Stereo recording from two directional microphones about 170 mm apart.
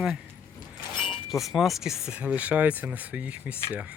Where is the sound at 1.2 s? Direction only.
Centre (ahead or behind).